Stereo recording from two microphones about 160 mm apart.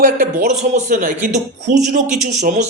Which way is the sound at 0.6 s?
50° right (ahead or behind).